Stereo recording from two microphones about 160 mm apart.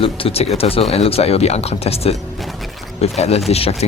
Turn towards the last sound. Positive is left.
turn(degrees=40)  # may be behind; listen again after turning